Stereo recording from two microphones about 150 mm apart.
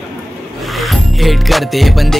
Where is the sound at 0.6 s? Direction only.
Centre (ahead or behind).